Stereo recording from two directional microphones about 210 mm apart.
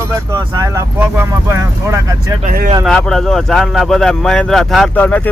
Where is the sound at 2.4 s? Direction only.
40° right (ahead or behind).